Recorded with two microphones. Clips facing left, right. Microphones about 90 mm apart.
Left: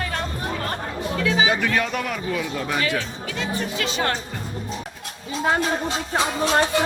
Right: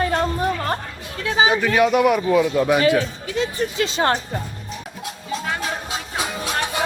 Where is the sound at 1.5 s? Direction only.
20° right (ahead or behind).